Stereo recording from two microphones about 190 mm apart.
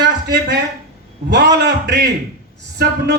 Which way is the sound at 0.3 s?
65° right (ahead or behind).